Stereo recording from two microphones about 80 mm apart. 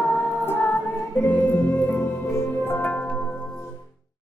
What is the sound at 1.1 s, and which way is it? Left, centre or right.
Music, left.